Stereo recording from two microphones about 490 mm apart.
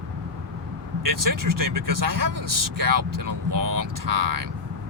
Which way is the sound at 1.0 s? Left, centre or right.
Right.